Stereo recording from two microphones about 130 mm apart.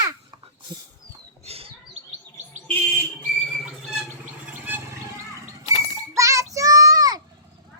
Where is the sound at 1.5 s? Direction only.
50° right (ahead or behind).